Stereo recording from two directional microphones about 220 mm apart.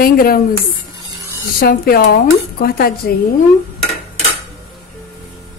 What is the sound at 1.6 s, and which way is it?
Speech, 40° left (ahead or behind).